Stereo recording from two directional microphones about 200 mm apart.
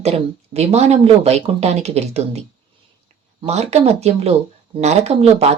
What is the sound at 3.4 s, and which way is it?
Speech, 35° right (ahead or behind).